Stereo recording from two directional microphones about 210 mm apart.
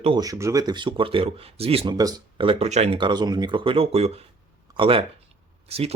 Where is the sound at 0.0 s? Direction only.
20° right (ahead or behind).